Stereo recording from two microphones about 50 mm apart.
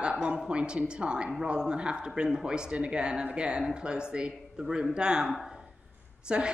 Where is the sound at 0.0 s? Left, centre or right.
Centre.